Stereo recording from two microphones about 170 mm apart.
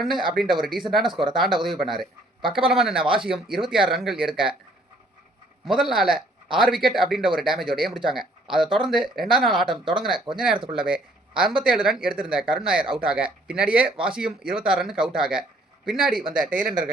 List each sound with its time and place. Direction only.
0.0 s a man's voice: centre (ahead or behind)
5.6 s a man's voice: centre (ahead or behind)
10.6 s speech: 30° right (ahead or behind)
10.8 s a man's voice: 5° right (ahead or behind)